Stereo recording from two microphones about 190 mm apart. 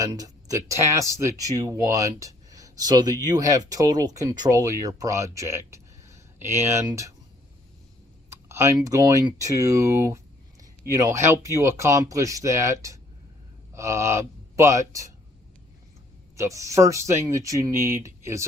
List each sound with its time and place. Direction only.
0.0 s speech: 20° right (ahead or behind)
8.3 s speech: 15° right (ahead or behind)
16.4 s speech: 15° right (ahead or behind)